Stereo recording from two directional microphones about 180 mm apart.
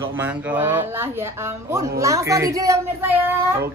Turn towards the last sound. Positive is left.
turn(degrees=-15)  # may be behind; listen again after turning